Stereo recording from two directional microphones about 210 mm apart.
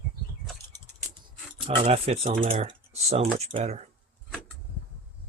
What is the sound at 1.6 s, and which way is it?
Speech, 30° right (ahead or behind).